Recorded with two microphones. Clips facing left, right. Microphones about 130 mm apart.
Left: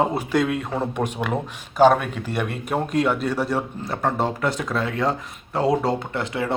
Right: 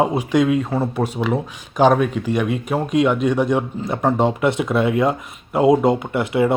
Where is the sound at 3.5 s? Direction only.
20° right (ahead or behind).